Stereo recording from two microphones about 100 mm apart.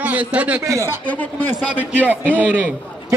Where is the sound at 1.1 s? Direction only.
15° left (ahead or behind).